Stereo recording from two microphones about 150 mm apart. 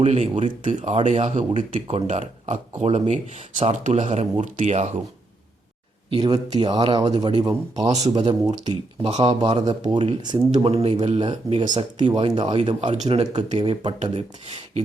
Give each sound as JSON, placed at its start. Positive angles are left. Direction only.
{"t": 0.0, "sound": "speech", "side_deg": -50}
{"t": 6.1, "sound": "speech", "side_deg": -30}